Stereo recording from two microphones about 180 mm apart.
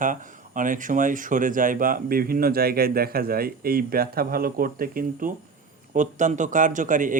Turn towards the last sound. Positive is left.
turn(degrees=-45)  # may be behind; listen again after turning